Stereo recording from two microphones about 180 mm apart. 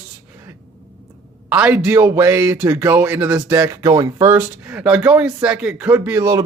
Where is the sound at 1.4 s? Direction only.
5° right (ahead or behind).